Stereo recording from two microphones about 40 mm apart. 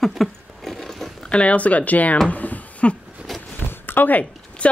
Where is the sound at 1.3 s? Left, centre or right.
Left.